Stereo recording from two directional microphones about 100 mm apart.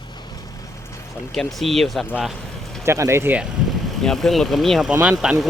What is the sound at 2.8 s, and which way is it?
Speech, 30° right (ahead or behind).